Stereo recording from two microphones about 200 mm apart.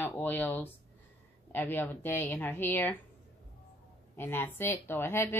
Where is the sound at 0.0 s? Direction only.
10° left (ahead or behind).